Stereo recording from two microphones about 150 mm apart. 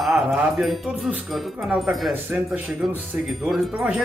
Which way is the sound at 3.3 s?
Centre (ahead or behind).